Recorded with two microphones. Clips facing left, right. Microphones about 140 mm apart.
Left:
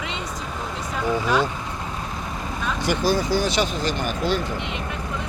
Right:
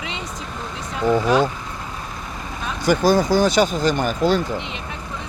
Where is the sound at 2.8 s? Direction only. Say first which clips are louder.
Right 6 dB; 45° right (ahead or behind).